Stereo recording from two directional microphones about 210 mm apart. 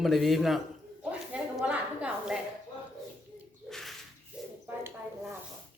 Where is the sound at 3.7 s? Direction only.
Centre (ahead or behind).